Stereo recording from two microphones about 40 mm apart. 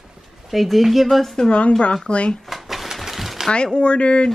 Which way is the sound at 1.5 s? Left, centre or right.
Left.